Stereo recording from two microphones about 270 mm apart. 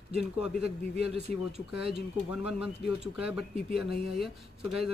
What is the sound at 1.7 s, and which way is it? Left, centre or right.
Speech, centre.